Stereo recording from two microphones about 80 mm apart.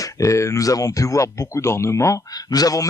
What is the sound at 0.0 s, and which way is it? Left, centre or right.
Speech, left.